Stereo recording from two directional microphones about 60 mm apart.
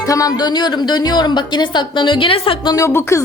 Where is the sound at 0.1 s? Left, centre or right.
Left.